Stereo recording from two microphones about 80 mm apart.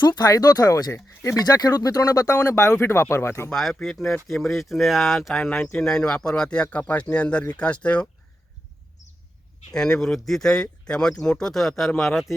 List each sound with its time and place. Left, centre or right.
0.0 s speech: left
0.9 s speech: left
1.5 s speech: left
2.3 s speech: left
3.5 s speech: centre
9.7 s speech: centre